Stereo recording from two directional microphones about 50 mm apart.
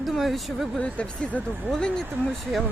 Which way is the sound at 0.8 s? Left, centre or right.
Left.